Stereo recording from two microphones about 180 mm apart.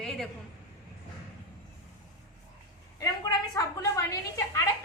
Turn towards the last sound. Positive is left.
turn(degrees=20)  # may be behind; listen again after turning